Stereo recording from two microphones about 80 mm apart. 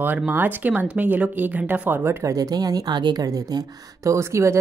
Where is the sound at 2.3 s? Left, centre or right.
Right.